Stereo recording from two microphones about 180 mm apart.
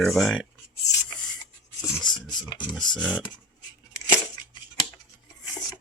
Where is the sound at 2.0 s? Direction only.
25° left (ahead or behind).